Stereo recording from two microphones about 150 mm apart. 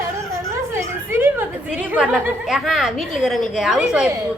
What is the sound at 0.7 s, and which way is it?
A woman's voice, 15° right (ahead or behind).